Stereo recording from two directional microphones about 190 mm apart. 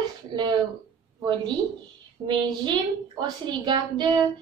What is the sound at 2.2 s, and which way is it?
A woman's voice, 20° right (ahead or behind).